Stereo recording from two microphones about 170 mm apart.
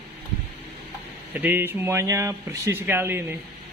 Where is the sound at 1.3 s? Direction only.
10° right (ahead or behind).